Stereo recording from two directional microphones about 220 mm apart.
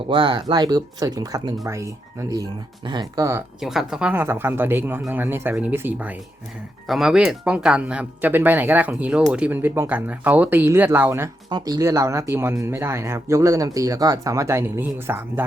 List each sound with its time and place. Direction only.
0.1 s speech: 20° right (ahead or behind)
3.6 s speech: centre (ahead or behind)